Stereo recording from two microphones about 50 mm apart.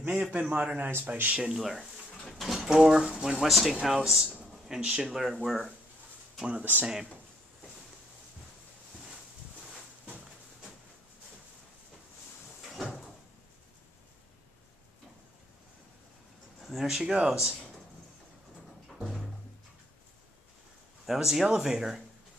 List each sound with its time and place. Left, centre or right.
0.1 s a man's voice: right
0.7 s speech: right
1.3 s speech: centre
1.6 s speech: centre
2.4 s a sound: centre
2.7 s speech: centre
3.4 s speech: centre
4.6 s speech: centre
5.0 s speech: centre
6.6 s speech: right
12.6 s cupboard open or close: centre
16.6 s speech: centre
18.9 s music: centre
21.0 s speech: centre